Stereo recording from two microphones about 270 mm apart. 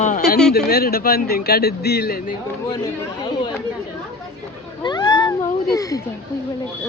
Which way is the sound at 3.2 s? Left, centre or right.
Centre.